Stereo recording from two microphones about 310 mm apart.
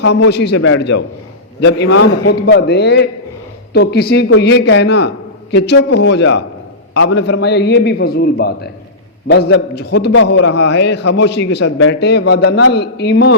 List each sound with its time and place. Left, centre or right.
0.3 s a man's voice: left